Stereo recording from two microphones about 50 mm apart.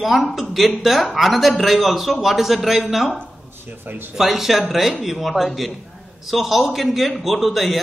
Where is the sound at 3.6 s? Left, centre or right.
Right.